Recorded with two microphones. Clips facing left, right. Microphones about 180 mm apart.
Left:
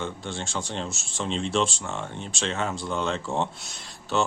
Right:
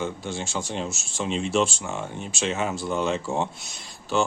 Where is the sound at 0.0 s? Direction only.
5° right (ahead or behind).